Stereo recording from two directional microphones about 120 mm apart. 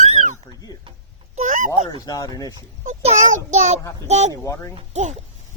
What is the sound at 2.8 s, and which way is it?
A child's voice, 80° right.